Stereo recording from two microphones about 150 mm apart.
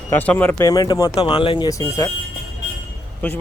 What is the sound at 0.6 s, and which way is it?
Speech, 25° left (ahead or behind).